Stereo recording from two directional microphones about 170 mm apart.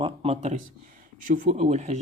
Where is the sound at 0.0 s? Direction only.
35° right (ahead or behind).